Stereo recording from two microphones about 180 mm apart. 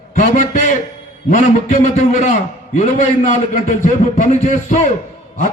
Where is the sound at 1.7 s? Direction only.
45° left (ahead or behind).